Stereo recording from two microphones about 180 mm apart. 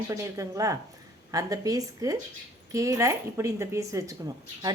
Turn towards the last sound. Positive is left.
turn(degrees=-20)  # may be behind; listen again after turning